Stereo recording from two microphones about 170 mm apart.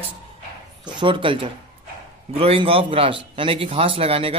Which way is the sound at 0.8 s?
30° right (ahead or behind).